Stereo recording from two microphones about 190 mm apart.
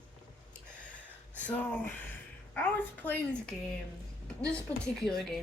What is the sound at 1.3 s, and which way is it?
A child's voice, 5° left (ahead or behind).